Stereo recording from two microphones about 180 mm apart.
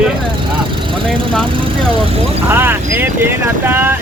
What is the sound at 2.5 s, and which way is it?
Speech, 10° right (ahead or behind).